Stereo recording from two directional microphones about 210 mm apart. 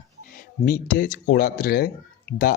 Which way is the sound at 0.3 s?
45° left (ahead or behind).